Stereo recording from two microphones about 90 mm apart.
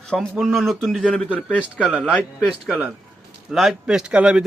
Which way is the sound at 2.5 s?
10° right (ahead or behind).